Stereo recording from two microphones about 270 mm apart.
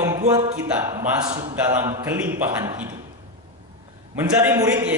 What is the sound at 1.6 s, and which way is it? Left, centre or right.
A man's voice, centre.